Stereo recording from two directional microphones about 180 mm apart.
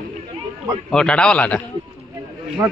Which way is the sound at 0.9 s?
5° left (ahead or behind).